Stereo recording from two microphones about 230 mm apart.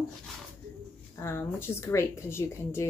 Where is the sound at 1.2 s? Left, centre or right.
Centre.